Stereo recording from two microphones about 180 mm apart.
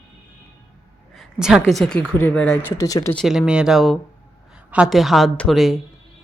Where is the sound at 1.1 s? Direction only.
Centre (ahead or behind).